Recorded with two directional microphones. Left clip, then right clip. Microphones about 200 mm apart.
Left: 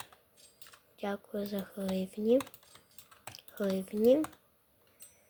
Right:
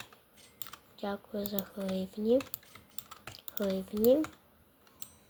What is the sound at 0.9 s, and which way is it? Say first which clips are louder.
Speech: even; 15° left (ahead or behind).